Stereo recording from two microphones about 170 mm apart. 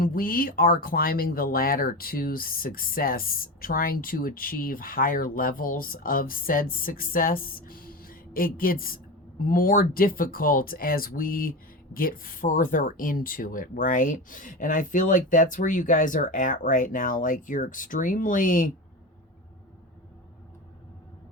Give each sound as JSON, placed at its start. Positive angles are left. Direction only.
{"t": 0.0, "sound": "speech", "side_deg": 55}